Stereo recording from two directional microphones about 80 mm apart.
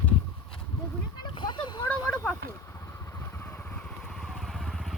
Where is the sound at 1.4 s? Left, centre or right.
Left.